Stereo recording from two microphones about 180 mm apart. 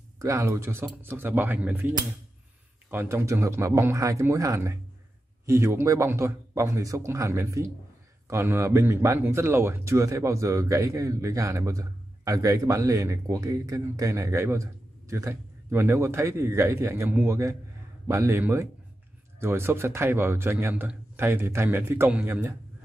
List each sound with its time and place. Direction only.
0.2 s speech: 15° right (ahead or behind)
2.9 s speech: 15° right (ahead or behind)